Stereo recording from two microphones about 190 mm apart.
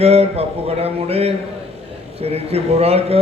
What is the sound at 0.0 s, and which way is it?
A man's voice, 30° right (ahead or behind).